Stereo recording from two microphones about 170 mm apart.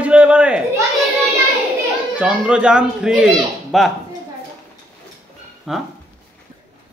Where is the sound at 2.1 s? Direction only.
5° right (ahead or behind).